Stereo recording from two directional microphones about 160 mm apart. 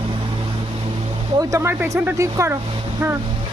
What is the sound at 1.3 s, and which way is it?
Speech, 15° right (ahead or behind).